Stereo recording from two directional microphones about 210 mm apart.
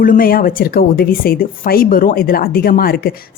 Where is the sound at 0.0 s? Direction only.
40° left (ahead or behind).